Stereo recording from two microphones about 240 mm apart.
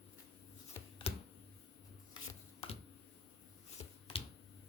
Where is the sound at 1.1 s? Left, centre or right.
Left.